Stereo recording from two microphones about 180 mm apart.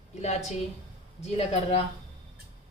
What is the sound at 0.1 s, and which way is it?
A woman's voice, 40° left (ahead or behind).